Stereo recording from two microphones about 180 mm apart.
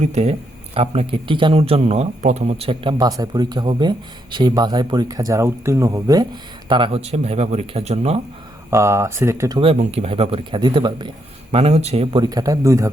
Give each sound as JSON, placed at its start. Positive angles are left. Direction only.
{"t": 0.0, "sound": "a man's voice", "side_deg": -35}
{"t": 8.7, "sound": "speech", "side_deg": -15}
{"t": 9.6, "sound": "a man's voice", "side_deg": -30}
{"t": 11.5, "sound": "a man's voice", "side_deg": -35}